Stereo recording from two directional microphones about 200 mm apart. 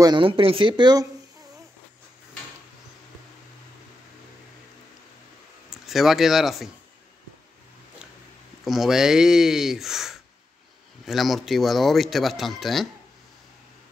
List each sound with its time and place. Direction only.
0.0 s speech: 25° right (ahead or behind)
5.7 s speech: centre (ahead or behind)
8.6 s speech: centre (ahead or behind)